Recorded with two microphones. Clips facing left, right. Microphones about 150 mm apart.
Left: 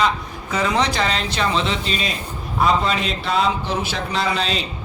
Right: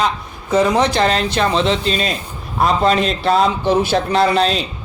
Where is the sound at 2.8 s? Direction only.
45° right (ahead or behind).